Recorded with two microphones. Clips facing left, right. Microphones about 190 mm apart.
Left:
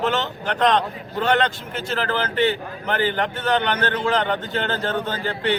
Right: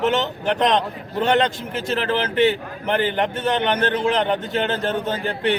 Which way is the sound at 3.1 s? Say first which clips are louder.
Right 1 dB; 20° right (ahead or behind).